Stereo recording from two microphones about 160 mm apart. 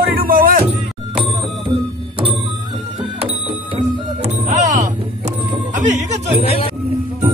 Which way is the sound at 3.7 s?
45° right (ahead or behind).